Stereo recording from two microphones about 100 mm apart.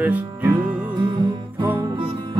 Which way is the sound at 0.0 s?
15° right (ahead or behind).